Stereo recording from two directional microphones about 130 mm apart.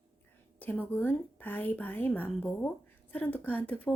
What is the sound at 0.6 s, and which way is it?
A woman's voice, 15° left (ahead or behind).